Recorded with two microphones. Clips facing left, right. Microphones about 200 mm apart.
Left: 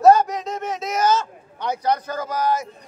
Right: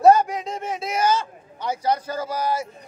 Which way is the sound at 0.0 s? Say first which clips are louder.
Left 1 dB; 10° right (ahead or behind).